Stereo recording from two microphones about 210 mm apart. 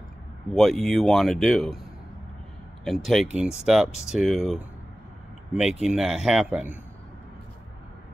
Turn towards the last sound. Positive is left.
turn(degrees=-5)  # may be behind; listen again after turning